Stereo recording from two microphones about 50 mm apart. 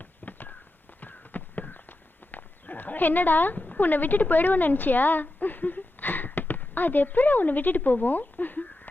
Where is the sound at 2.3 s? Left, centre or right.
Left.